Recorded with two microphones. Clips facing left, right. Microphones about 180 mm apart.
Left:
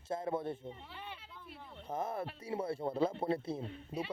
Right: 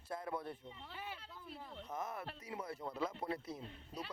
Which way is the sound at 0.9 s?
5° right (ahead or behind).